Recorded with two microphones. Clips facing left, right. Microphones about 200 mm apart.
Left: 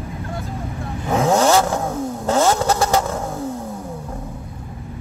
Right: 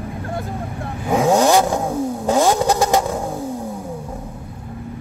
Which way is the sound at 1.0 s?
15° right (ahead or behind).